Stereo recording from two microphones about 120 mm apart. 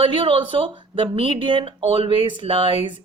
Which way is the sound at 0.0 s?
45° right (ahead or behind).